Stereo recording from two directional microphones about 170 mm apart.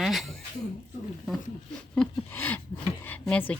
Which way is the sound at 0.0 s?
Centre (ahead or behind).